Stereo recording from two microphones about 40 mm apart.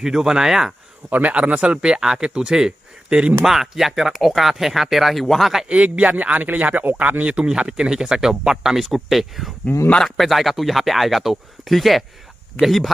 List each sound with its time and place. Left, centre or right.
0.0 s speech: centre
1.3 s speech: right
3.4 s speech: centre
5.7 s speech: right
7.3 s speech: centre
9.7 s speech: left
10.0 s speech: centre